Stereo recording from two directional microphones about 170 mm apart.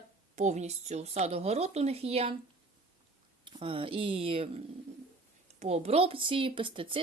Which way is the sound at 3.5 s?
30° right (ahead or behind).